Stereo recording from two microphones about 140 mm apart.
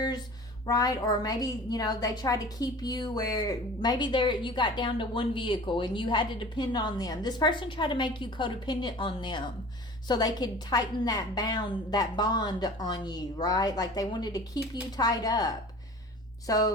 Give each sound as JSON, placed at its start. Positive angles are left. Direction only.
{"t": 0.6, "sound": "a woman's voice", "side_deg": 25}